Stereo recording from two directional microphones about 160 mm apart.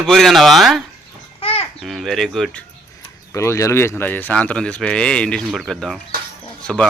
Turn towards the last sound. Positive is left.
turn(degrees=5)  # may be behind; listen again after turning